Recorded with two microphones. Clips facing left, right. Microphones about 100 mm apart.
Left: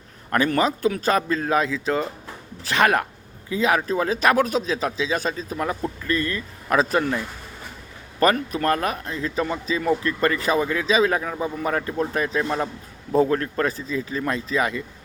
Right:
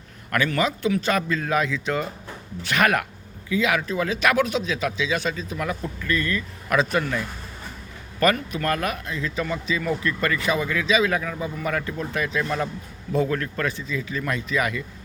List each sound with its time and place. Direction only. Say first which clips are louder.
0.3 s speech: left 3 dB; 35° left (ahead or behind)
8.2 s speech: left 2 dB; 30° left (ahead or behind)